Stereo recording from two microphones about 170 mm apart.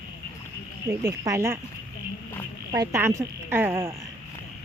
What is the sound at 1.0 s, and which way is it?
Speech, 20° right (ahead or behind).